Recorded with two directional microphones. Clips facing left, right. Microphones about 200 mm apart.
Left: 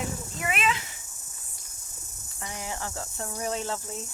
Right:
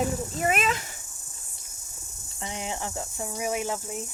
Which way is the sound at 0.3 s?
40° right (ahead or behind).